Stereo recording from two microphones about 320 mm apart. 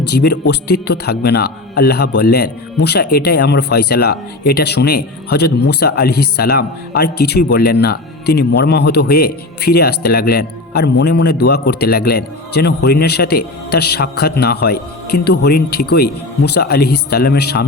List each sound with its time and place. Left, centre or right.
0.1 s speech: left